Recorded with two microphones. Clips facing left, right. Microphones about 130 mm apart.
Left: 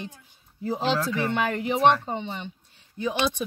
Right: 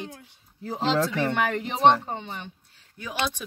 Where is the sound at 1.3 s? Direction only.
10° left (ahead or behind).